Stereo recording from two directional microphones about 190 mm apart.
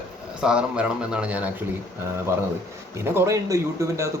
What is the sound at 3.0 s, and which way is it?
Speech, 10° right (ahead or behind).